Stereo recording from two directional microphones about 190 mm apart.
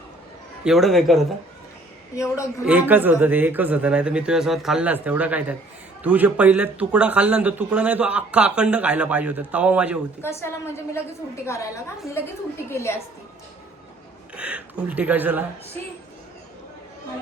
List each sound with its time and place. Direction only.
0.6 s a man's voice: centre (ahead or behind)
2.6 s speech: 10° right (ahead or behind)
10.2 s a woman's voice: 15° left (ahead or behind)
14.3 s speech: 5° right (ahead or behind)